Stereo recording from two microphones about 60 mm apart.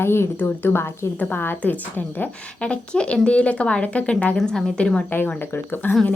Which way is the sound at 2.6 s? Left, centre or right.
Centre.